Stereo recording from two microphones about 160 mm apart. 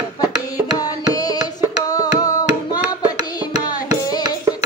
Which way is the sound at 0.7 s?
25° left (ahead or behind).